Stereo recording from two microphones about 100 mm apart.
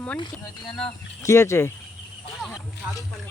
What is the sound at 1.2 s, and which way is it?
Speech, 30° left (ahead or behind).